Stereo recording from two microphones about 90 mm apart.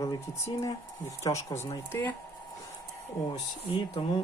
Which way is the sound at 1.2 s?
35° left (ahead or behind).